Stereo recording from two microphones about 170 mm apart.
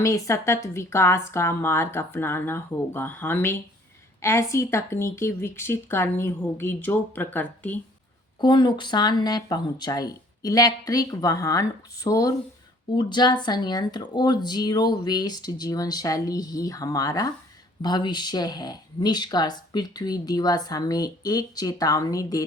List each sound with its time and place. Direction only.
0.0 s speech: 15° left (ahead or behind)
8.4 s speech: 25° left (ahead or behind)